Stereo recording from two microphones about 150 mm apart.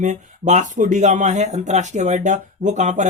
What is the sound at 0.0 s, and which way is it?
Speech, 50° right (ahead or behind).